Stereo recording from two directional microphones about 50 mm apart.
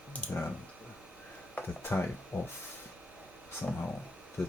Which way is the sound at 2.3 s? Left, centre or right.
Left.